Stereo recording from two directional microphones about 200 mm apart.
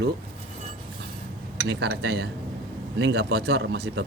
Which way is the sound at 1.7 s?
60° right (ahead or behind).